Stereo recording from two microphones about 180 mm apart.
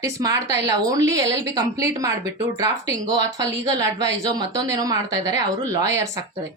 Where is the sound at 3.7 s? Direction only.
20° right (ahead or behind).